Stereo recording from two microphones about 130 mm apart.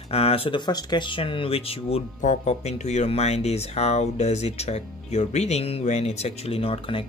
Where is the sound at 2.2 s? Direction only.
60° left (ahead or behind).